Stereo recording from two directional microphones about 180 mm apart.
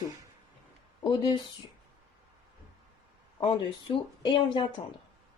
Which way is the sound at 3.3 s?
25° left (ahead or behind).